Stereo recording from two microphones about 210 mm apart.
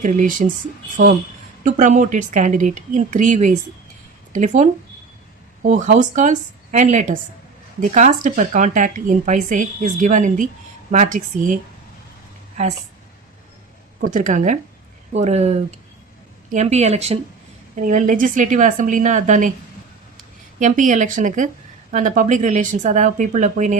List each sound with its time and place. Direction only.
0.0 s a woman's voice: 40° right (ahead or behind)
1.6 s a woman's voice: 35° right (ahead or behind)
14.0 s a woman's voice: 40° right (ahead or behind)
20.6 s a woman's voice: 40° right (ahead or behind)